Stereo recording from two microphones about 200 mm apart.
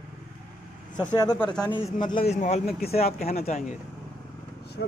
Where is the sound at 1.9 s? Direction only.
40° left (ahead or behind).